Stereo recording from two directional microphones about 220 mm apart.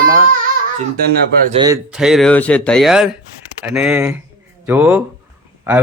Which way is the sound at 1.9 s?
5° right (ahead or behind).